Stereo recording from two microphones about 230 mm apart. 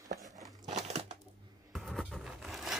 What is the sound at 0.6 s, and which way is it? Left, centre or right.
Crumpling, right.